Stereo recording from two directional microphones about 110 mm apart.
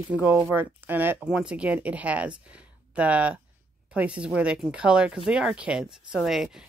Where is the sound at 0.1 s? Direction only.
15° right (ahead or behind).